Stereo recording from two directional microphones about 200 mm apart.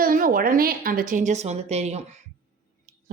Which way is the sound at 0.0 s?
45° right (ahead or behind).